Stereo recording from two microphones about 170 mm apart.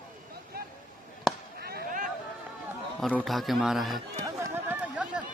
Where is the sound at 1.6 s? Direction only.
60° right (ahead or behind).